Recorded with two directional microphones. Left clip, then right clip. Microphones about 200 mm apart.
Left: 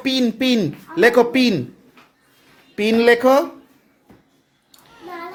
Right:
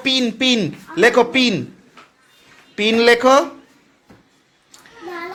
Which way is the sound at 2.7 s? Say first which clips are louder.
Right 1 dB; 15° left (ahead or behind).